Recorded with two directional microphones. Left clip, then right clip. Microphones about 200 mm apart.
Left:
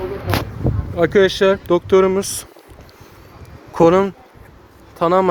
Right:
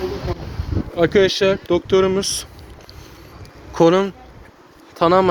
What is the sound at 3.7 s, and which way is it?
Speech, 20° left (ahead or behind).